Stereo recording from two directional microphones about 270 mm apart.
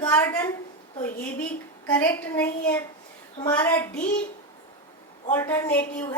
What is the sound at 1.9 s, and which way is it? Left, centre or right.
A woman's voice, centre.